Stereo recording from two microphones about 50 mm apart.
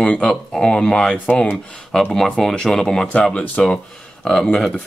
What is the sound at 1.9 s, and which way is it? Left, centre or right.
Speech, centre.